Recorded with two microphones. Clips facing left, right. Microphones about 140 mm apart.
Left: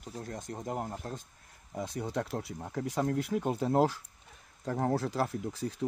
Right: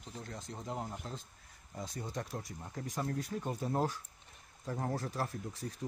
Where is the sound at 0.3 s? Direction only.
50° left (ahead or behind).